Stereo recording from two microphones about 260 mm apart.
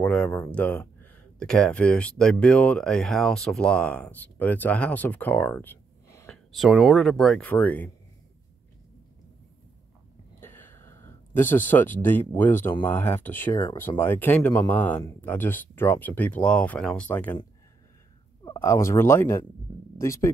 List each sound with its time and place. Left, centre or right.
0.0 s speech: centre
10.4 s a sound: centre
11.5 s speech: centre
18.4 s speech: centre